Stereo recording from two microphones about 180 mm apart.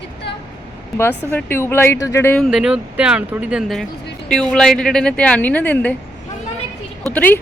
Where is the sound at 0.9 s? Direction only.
10° left (ahead or behind).